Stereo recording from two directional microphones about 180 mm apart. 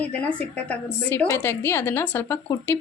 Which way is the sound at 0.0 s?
5° left (ahead or behind).